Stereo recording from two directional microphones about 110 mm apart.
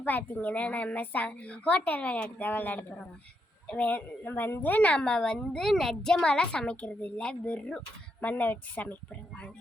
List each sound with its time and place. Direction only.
0.0 s a woman's voice: 15° left (ahead or behind)